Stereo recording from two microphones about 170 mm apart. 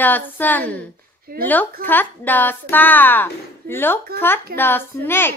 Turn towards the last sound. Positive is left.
turn(degrees=15)  # may be behind; listen again after turning